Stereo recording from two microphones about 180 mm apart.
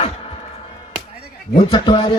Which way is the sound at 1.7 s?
25° left (ahead or behind).